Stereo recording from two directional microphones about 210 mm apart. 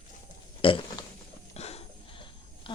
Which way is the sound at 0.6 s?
25° left (ahead or behind).